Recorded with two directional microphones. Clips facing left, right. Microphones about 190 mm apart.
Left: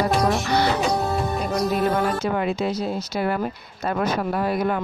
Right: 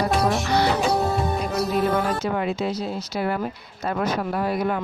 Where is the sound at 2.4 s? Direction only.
50° left (ahead or behind).